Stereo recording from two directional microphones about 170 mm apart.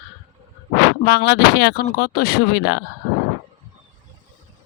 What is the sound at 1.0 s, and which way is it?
Speech, 70° left (ahead or behind).